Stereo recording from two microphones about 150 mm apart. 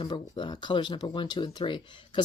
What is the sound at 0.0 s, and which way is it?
Speech, 30° left (ahead or behind).